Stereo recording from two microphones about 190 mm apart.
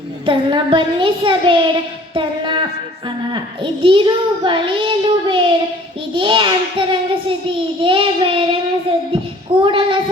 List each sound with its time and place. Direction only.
0.3 s child singing: 25° right (ahead or behind)